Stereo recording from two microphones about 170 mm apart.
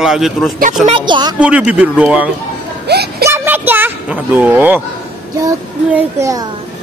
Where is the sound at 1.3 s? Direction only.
5° right (ahead or behind).